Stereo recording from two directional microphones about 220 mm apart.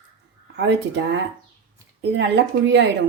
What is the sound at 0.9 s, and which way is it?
A woman's voice, 50° right (ahead or behind).